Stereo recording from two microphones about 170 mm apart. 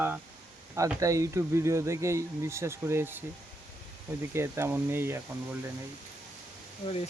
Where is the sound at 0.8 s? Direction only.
20° right (ahead or behind).